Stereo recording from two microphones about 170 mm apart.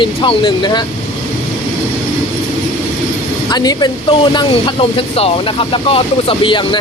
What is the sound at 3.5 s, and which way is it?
Speech, 25° left (ahead or behind).